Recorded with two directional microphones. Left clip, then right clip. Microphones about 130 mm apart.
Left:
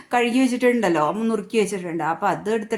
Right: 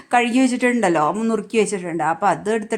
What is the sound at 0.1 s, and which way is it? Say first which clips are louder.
A woman's voice: right 3 dB; 25° right (ahead or behind).